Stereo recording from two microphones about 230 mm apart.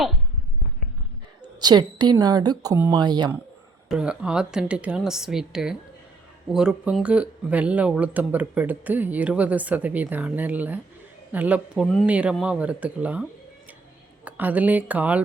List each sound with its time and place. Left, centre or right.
1.6 s speech: centre
3.8 s speech: centre
14.3 s speech: centre